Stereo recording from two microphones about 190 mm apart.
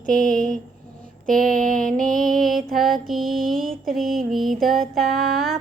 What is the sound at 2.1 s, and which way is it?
Music, 45° right (ahead or behind).